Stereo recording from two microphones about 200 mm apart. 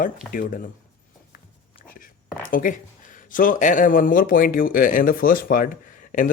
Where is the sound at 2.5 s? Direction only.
40° left (ahead or behind).